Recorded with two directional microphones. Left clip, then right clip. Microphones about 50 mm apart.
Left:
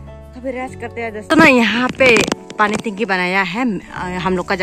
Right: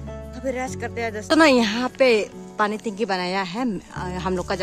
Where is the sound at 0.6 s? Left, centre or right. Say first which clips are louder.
Left 2 dB; right.